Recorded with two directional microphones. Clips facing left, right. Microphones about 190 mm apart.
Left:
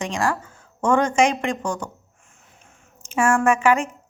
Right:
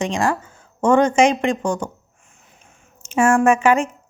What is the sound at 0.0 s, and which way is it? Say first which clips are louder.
Speech: right 3 dB; 20° right (ahead or behind).